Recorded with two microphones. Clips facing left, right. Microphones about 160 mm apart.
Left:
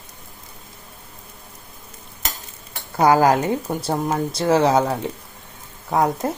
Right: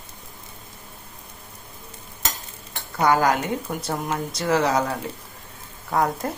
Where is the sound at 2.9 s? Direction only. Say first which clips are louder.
Left 4 dB; 35° left (ahead or behind).